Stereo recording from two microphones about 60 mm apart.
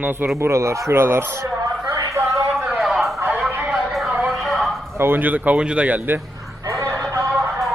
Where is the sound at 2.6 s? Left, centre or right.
Centre.